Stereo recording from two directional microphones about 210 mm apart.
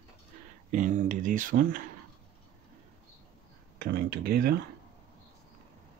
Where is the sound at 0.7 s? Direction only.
35° right (ahead or behind).